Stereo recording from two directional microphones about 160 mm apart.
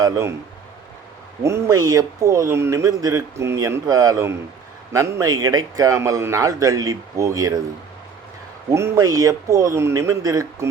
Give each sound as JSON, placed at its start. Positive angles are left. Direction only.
{"t": 0.0, "sound": "speech", "side_deg": -15}
{"t": 1.5, "sound": "speech", "side_deg": -15}
{"t": 8.7, "sound": "speech", "side_deg": -20}